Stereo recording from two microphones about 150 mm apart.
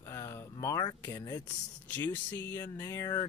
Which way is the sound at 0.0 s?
20° left (ahead or behind).